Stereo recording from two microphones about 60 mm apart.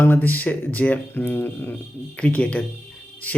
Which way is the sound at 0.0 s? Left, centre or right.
Left.